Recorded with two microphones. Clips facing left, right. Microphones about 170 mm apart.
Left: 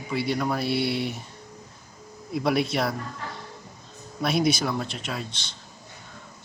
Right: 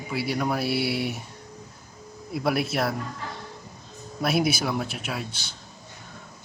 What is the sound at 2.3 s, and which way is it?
Speech, centre (ahead or behind).